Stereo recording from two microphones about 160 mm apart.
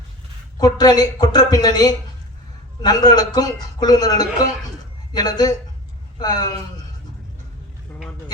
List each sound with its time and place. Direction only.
0.6 s a man's voice: 25° left (ahead or behind)